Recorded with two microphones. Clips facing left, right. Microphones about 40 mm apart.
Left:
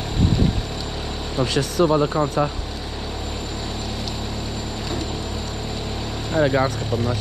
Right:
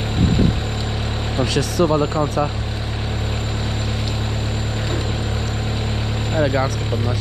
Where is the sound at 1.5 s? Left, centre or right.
Right.